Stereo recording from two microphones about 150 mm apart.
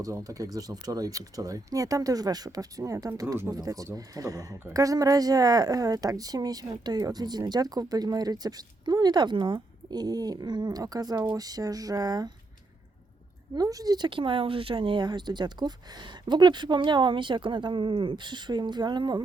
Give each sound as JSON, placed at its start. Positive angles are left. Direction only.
{"t": 0.0, "sound": "speech", "side_deg": -20}
{"t": 13.6, "sound": "speech", "side_deg": -25}